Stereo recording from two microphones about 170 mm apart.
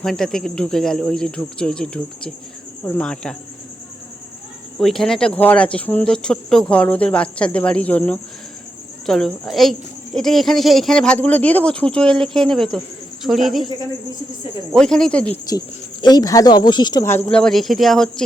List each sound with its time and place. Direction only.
0.0 s speech: centre (ahead or behind)
4.8 s speech: centre (ahead or behind)
14.7 s speech: 5° left (ahead or behind)
15.4 s speech: 25° left (ahead or behind); by 18.1 s centre (ahead or behind)